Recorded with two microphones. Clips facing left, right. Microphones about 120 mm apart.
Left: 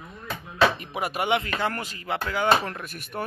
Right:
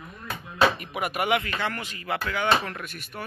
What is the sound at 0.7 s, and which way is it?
Speech, 30° left (ahead or behind).